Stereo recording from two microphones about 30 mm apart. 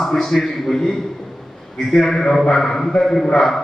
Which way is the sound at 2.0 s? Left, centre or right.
Centre.